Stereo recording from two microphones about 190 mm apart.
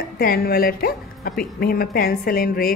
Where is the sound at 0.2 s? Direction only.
50° left (ahead or behind).